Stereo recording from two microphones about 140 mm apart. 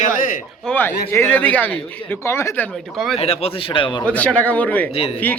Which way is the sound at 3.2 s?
45° left (ahead or behind).